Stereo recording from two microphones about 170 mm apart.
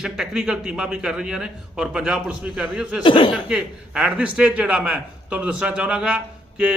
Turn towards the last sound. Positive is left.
turn(degrees=-5)  # may be behind; listen again after turning